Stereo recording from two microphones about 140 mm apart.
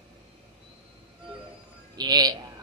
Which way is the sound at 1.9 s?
30° right (ahead or behind).